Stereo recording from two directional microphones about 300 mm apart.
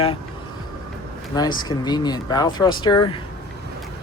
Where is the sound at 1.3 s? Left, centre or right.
Centre.